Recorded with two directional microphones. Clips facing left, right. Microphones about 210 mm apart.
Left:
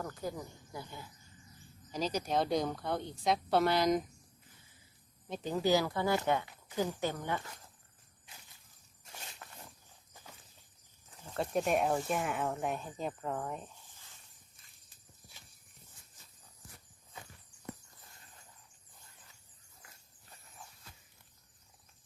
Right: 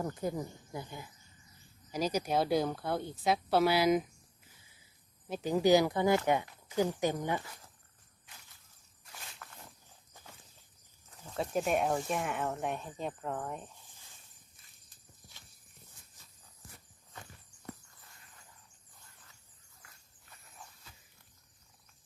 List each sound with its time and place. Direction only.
0.0 s speech: 20° right (ahead or behind); by 4.0 s 5° right (ahead or behind)
5.3 s speech: 10° right (ahead or behind)
9.4 s a sound: 20° left (ahead or behind)
11.3 s speech: centre (ahead or behind)